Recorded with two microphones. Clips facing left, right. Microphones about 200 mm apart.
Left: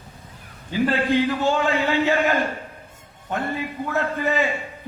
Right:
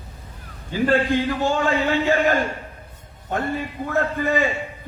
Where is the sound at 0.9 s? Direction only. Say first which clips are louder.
Right 2 dB; 50° right (ahead or behind).